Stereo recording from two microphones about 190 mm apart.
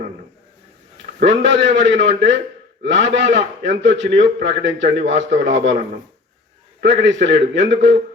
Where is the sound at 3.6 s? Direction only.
70° right (ahead or behind).